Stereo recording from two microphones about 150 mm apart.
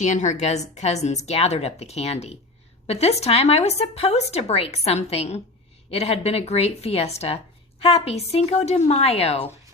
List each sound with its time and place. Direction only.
0.0 s a woman's voice: 55° left (ahead or behind)